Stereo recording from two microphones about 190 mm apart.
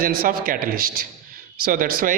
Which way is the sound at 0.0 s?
50° right (ahead or behind).